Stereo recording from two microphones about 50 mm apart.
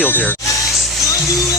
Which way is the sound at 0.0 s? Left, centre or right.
Left.